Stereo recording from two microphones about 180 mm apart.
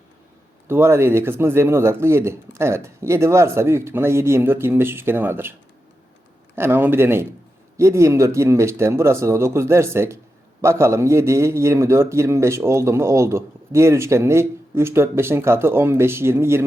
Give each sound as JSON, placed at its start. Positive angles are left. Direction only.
{"t": 0.7, "sound": "a man's voice", "side_deg": -15}
{"t": 6.6, "sound": "a man's voice", "side_deg": -10}